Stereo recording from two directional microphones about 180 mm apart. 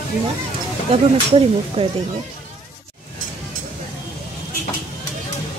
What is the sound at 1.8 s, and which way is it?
Speech, 35° right (ahead or behind).